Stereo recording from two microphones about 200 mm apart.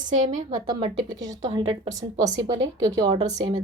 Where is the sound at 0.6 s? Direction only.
20° right (ahead or behind).